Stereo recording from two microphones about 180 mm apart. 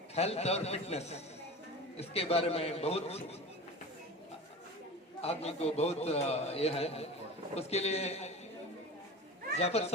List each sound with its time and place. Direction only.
0.1 s a man's voice: 35° left (ahead or behind)
5.2 s a man's voice: 35° left (ahead or behind)
9.6 s a man's voice: 35° left (ahead or behind)